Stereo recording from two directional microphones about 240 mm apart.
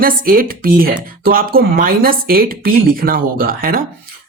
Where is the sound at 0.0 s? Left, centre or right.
Right.